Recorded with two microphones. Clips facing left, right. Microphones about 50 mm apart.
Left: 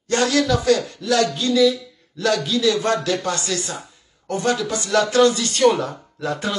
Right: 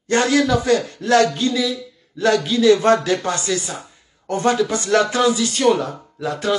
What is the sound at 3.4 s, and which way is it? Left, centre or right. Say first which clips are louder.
Speech: right 3 dB; centre.